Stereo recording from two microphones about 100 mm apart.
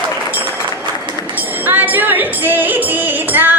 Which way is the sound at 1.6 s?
20° right (ahead or behind).